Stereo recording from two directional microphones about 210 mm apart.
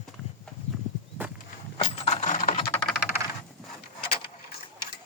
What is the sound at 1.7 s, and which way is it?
Coin, 25° left (ahead or behind).